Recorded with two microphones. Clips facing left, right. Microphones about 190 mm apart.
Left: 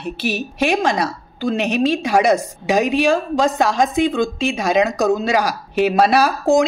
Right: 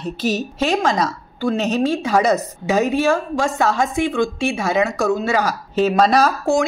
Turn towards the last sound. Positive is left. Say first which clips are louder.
# left 2 dB
turn(degrees=15)  # may be behind; listen again after turning